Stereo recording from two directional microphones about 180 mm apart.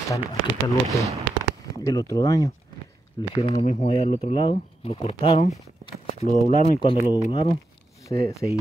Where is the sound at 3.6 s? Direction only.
35° left (ahead or behind).